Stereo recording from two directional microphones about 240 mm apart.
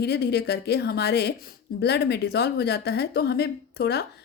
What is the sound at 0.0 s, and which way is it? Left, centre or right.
Speech, left.